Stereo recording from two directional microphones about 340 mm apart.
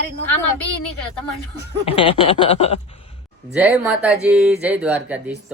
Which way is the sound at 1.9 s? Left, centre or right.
Centre.